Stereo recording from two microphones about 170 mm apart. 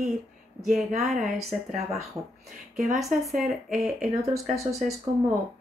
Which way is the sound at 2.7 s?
Centre (ahead or behind).